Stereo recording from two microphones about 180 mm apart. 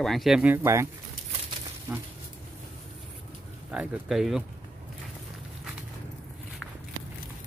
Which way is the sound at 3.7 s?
5° right (ahead or behind).